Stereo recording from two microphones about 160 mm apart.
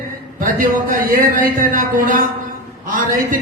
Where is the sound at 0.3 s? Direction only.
60° right (ahead or behind).